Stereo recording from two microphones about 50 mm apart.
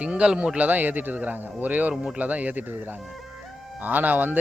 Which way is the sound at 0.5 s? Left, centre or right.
Right.